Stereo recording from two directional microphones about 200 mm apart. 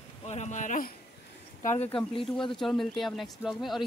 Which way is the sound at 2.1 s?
25° left (ahead or behind).